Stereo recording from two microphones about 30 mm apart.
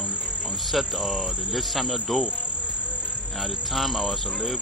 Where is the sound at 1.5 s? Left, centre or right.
Centre.